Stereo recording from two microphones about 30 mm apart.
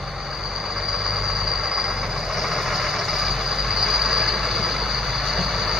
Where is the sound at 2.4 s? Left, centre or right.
Centre.